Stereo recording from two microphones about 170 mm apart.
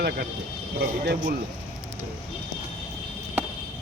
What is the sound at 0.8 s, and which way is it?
Speech, 80° right.